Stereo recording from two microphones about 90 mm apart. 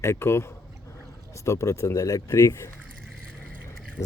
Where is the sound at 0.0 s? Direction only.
30° left (ahead or behind).